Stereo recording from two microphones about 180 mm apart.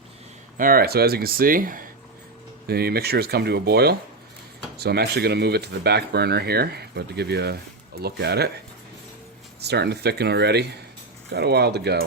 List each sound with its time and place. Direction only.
0.5 s speech: 50° right (ahead or behind)
9.6 s speech: 65° right (ahead or behind)